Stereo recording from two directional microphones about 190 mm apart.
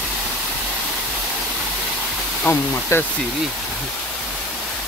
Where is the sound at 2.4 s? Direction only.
10° left (ahead or behind).